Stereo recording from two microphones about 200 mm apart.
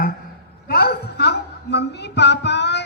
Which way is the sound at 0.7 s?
50° left (ahead or behind).